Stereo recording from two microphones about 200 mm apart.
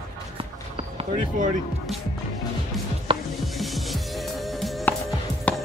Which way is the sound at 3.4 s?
Centre (ahead or behind).